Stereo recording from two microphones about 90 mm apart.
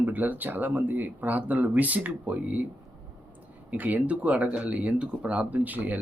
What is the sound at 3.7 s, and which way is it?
Speech, 15° right (ahead or behind).